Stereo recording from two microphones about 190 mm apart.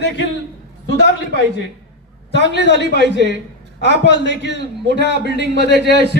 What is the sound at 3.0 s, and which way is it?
Speech, 65° right (ahead or behind).